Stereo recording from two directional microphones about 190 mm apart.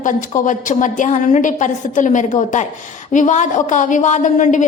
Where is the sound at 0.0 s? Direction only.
40° left (ahead or behind).